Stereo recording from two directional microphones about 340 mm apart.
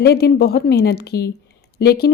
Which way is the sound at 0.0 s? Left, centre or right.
Left.